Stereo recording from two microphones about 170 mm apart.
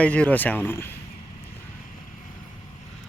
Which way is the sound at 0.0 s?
10° left (ahead or behind).